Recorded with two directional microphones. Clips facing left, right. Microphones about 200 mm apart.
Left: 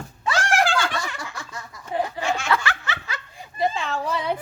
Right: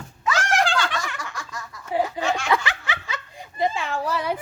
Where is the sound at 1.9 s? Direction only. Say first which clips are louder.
Right 2 dB; 10° right (ahead or behind).